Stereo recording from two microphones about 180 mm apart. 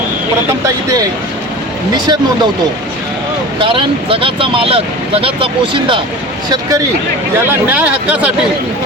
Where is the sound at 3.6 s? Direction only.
30° right (ahead or behind).